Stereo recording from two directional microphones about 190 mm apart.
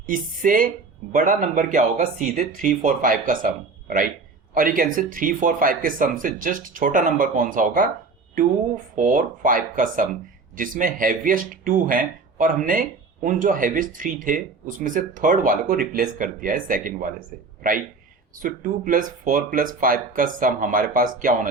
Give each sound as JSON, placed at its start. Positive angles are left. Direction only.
{"t": 0.1, "sound": "speech", "side_deg": -45}